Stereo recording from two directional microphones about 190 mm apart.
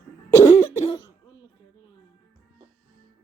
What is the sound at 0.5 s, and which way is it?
Cough, 30° left (ahead or behind).